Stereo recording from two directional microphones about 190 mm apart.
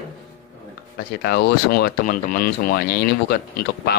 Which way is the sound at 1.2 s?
60° left (ahead or behind).